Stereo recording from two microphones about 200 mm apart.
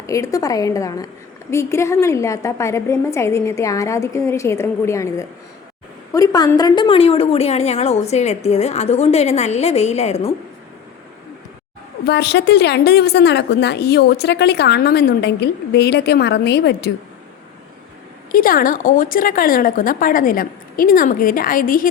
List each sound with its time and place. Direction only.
0.1 s a woman's voice: 15° left (ahead or behind); by 10.3 s 30° left (ahead or behind)
12.0 s a woman's voice: 55° left (ahead or behind)
18.3 s a woman's voice: 45° left (ahead or behind)